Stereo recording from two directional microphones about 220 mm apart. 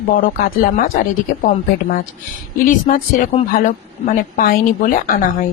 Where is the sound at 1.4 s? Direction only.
40° left (ahead or behind).